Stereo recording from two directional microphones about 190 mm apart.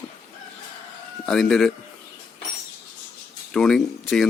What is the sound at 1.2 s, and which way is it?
Speech, 5° left (ahead or behind).